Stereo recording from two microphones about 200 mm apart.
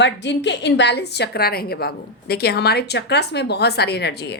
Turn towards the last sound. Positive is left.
turn(degrees=55)  # may be behind; listen again after turning